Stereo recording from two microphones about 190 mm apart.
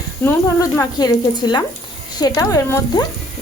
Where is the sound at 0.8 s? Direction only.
20° left (ahead or behind).